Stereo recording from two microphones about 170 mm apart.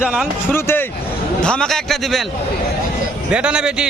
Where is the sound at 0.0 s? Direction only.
5° right (ahead or behind).